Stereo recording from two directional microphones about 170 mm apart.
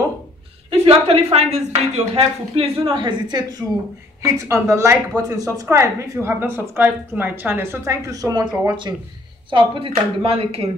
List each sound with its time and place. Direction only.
0.7 s a woman's voice: 35° right (ahead or behind)